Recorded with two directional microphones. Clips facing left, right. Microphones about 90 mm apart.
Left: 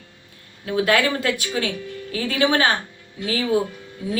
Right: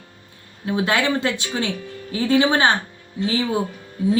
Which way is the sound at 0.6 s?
25° right (ahead or behind).